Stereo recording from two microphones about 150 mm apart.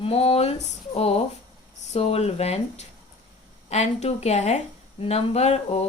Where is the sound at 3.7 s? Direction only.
45° left (ahead or behind).